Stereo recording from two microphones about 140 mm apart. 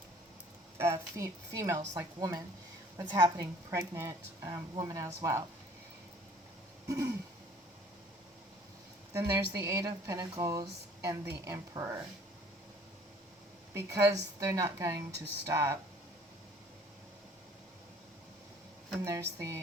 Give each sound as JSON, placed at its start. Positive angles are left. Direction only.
{"t": 0.8, "sound": "speech", "side_deg": -20}
{"t": 6.8, "sound": "a sound", "side_deg": -25}
{"t": 9.1, "sound": "speech", "side_deg": -20}
{"t": 13.7, "sound": "speech", "side_deg": -20}
{"t": 19.0, "sound": "speech", "side_deg": -20}